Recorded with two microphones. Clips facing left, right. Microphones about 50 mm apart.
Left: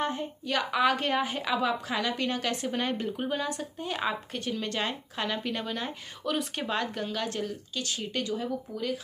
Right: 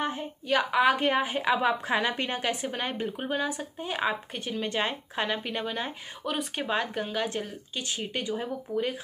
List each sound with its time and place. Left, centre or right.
0.0 s a woman's voice: centre; by 2.5 s right
2.5 s speech: centre; by 8.9 s right